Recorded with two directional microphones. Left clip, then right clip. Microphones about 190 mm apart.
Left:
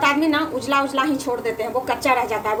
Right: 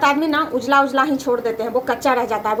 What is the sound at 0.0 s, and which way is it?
A woman's voice, 15° right (ahead or behind).